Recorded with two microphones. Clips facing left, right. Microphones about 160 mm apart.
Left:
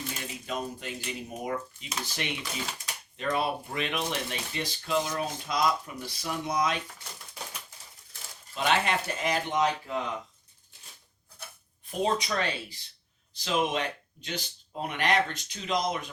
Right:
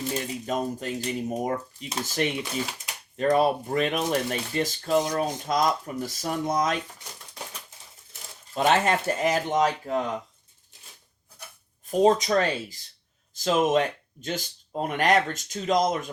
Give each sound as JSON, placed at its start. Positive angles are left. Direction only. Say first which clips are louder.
{"t": 0.4, "sound": "speech", "louder": "right 4 dB", "side_deg": -40}
{"t": 8.5, "sound": "speech", "louder": "right 5 dB", "side_deg": -40}
{"t": 11.9, "sound": "speech", "louder": "right 8 dB", "side_deg": -40}